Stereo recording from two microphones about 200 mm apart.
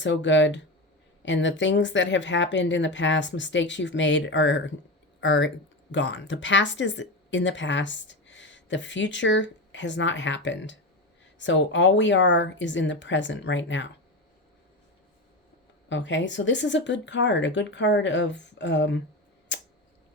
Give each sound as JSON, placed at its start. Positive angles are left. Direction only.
{"t": 0.0, "sound": "speech", "side_deg": 65}
{"t": 15.9, "sound": "speech", "side_deg": 65}
{"t": 19.5, "sound": "a sound", "side_deg": 65}